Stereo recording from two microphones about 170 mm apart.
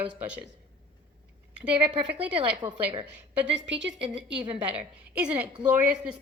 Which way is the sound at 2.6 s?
25° right (ahead or behind).